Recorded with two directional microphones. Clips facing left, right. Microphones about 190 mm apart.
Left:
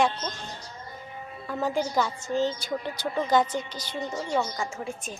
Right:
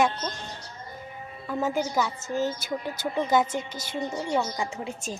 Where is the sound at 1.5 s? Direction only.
5° right (ahead or behind).